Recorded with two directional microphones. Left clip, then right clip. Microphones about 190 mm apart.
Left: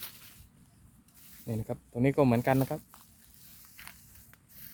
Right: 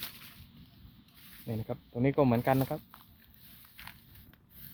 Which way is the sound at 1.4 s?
30° left (ahead or behind).